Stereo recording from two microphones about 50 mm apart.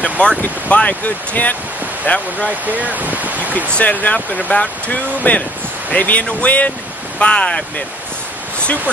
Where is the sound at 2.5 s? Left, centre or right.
Right.